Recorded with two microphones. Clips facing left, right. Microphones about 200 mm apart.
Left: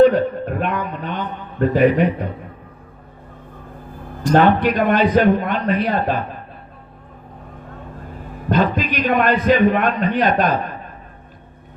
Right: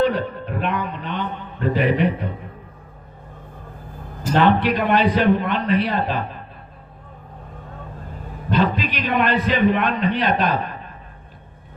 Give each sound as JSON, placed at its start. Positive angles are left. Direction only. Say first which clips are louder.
{"t": 0.0, "sound": "a sound", "louder": "left 7 dB", "side_deg": 45}
{"t": 4.4, "sound": "a man's voice", "louder": "left 2 dB", "side_deg": 45}
{"t": 8.4, "sound": "a man's voice", "louder": "left 2 dB", "side_deg": 45}